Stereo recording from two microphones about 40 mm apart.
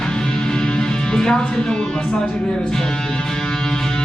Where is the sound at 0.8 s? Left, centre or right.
Centre.